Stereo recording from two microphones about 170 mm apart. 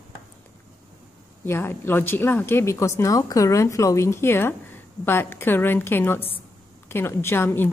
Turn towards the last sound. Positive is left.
turn(degrees=15)  # may be behind; listen again after turning